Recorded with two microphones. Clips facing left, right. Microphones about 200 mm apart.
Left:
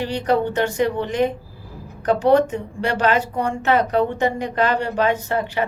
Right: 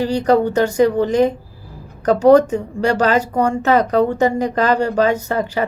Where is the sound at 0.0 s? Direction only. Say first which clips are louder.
Right 5 dB; 40° right (ahead or behind).